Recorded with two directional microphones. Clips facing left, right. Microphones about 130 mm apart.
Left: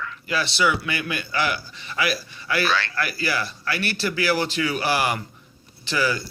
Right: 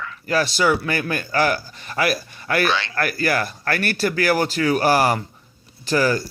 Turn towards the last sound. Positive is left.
turn(degrees=-45)  # may be behind; listen again after turning